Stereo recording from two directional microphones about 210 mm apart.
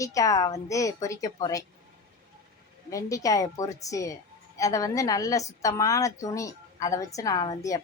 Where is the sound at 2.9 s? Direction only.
15° left (ahead or behind).